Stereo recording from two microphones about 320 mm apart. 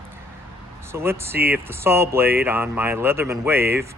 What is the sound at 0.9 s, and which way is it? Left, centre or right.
Speech, centre.